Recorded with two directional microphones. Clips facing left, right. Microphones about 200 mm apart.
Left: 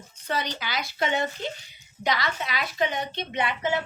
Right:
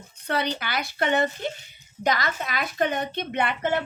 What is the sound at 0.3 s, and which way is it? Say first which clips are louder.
A woman's voice: right 3 dB; 60° right (ahead or behind).